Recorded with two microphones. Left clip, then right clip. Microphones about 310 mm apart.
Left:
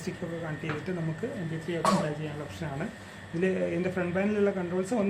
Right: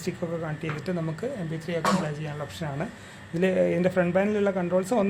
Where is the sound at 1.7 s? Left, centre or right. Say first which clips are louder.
Right 1 dB; right.